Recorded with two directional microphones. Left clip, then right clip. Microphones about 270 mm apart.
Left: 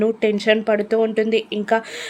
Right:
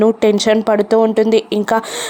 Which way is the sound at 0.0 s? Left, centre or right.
Centre.